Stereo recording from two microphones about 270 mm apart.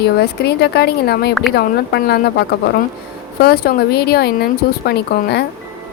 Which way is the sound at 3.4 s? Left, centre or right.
Left.